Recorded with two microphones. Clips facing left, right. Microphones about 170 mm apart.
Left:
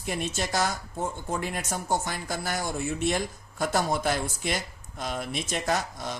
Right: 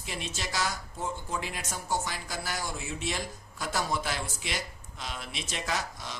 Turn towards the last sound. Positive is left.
turn(degrees=50)  # may be behind; listen again after turning